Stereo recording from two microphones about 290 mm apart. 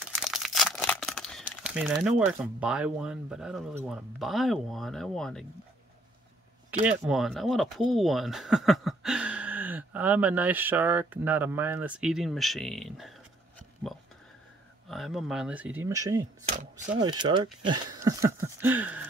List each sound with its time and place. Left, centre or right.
0.1 s speech: centre
6.9 s speech: centre
14.9 s speech: centre
16.5 s a sound: centre